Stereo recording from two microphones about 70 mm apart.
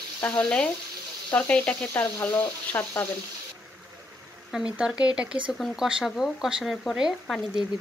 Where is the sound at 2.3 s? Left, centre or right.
Left.